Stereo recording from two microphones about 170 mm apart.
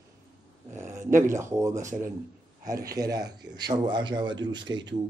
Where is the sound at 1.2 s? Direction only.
15° right (ahead or behind).